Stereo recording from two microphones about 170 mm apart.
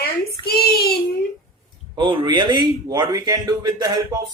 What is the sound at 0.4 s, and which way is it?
Child singing, 65° left (ahead or behind).